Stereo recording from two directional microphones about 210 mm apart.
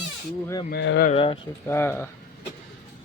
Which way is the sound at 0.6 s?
55° left (ahead or behind).